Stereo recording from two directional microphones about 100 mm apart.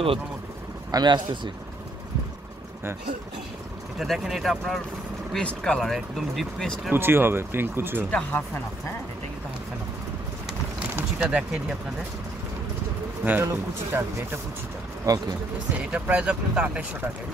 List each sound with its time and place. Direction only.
0.9 s speech: 45° right (ahead or behind)
4.0 s speech: 5° right (ahead or behind)
6.9 s speech: 20° right (ahead or behind)
8.1 s speech: 15° left (ahead or behind)
11.2 s speech: 10° right (ahead or behind)
13.2 s speech: 20° right (ahead or behind)
15.1 s speech: 35° right (ahead or behind)
15.8 s speech: 15° right (ahead or behind)